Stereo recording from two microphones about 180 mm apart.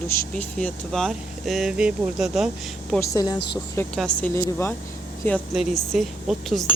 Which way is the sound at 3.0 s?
20° left (ahead or behind).